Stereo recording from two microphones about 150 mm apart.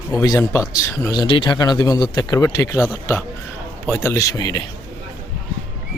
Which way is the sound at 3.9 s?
15° left (ahead or behind).